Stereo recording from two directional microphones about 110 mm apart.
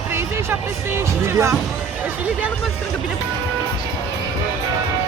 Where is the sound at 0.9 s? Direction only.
25° right (ahead or behind).